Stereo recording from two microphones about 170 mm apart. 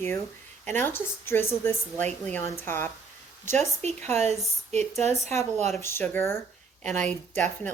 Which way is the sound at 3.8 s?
40° right (ahead or behind).